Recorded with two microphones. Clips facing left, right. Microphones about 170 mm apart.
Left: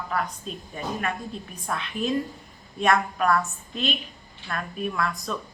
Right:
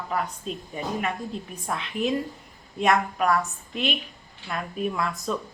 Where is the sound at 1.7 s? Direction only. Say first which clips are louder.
Right 1 dB; 20° right (ahead or behind).